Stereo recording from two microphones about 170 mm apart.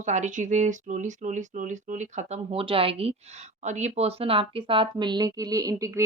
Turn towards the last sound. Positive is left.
turn(degrees=-20)  # may be behind; listen again after turning